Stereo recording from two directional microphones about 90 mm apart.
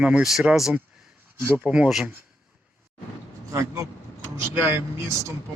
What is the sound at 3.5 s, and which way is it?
Speech, 35° right (ahead or behind).